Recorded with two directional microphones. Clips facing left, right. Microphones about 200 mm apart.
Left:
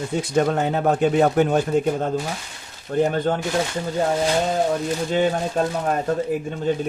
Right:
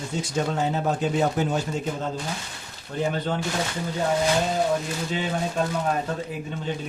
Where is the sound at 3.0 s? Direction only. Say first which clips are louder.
Left 6 dB; 50° left (ahead or behind).